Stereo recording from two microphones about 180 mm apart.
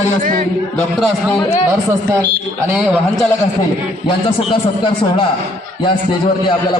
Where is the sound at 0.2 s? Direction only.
50° right (ahead or behind).